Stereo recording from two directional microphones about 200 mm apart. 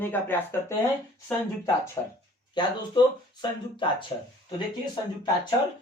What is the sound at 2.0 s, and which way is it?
Speech, 20° left (ahead or behind).